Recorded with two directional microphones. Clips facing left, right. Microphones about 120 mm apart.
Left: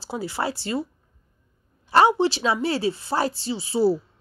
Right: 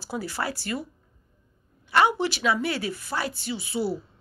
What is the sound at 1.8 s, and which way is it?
A woman's voice, 30° left (ahead or behind).